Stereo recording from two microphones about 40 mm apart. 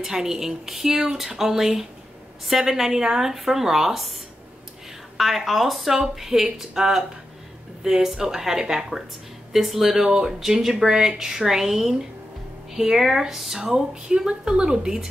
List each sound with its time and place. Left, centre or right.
0.0 s speech: centre